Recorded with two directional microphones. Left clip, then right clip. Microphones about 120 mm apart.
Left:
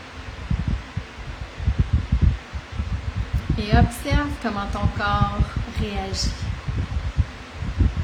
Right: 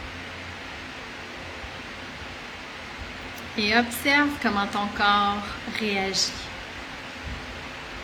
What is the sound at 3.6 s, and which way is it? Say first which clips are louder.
Speech: right 1 dB; 25° left (ahead or behind).